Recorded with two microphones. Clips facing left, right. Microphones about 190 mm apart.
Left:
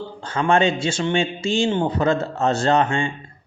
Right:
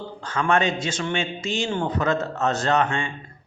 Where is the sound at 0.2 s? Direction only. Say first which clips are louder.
Left 4 dB; 30° left (ahead or behind).